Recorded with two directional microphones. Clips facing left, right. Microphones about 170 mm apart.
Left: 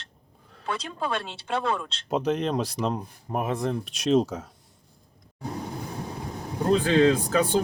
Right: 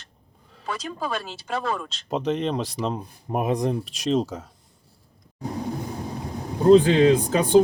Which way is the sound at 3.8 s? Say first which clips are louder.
Left 1 dB; centre (ahead or behind).